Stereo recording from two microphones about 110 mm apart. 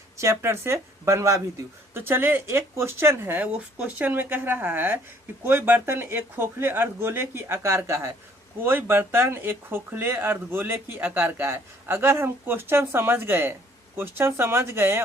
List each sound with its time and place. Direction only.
0.2 s speech: 25° right (ahead or behind)